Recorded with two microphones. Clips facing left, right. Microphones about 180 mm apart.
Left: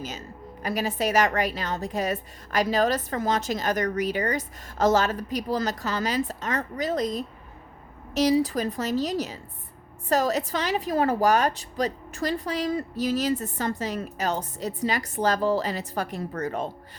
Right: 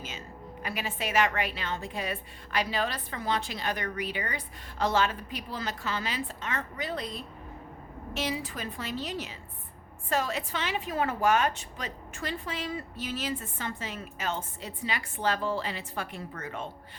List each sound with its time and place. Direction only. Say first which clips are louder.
0.6 s a woman's voice: left 8 dB; 40° left (ahead or behind)